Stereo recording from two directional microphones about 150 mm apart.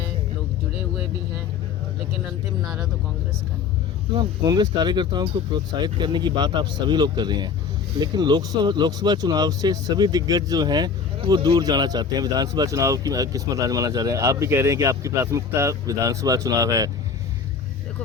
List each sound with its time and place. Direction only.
4.4 s speech: 25° right (ahead or behind)